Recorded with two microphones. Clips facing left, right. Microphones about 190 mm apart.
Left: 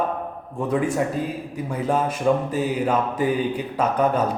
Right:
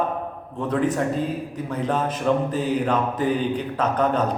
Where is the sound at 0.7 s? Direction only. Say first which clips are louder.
Even; 10° left (ahead or behind).